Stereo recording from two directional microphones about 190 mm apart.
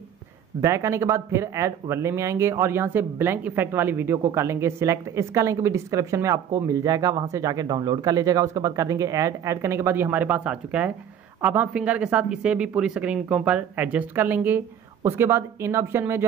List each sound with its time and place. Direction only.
0.6 s speech: 15° right (ahead or behind)